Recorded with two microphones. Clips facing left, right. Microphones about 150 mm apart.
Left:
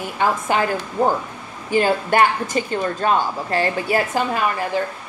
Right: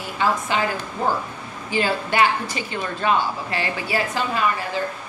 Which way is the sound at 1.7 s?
50° left (ahead or behind).